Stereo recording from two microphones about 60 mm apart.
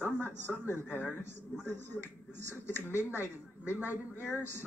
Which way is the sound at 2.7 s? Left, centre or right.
Left.